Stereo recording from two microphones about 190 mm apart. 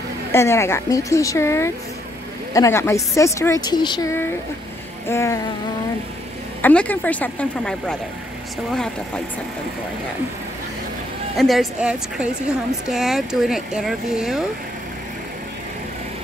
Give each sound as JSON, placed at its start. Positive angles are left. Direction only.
{"t": 0.3, "sound": "a woman's voice", "side_deg": 15}
{"t": 6.6, "sound": "a woman's voice", "side_deg": 5}
{"t": 11.3, "sound": "a woman's voice", "side_deg": 0}